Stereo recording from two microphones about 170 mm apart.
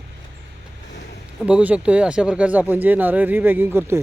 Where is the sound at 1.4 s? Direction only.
5° right (ahead or behind).